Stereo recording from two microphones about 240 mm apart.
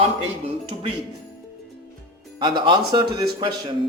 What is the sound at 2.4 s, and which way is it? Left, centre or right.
Speech, centre.